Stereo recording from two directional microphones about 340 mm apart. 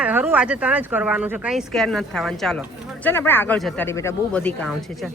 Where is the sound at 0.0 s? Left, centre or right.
Centre.